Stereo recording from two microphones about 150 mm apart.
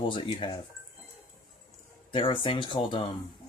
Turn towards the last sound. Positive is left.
turn(degrees=35)  # may be behind; listen again after turning